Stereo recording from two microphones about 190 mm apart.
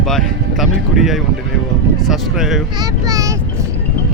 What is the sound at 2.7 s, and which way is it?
Speech, 20° right (ahead or behind).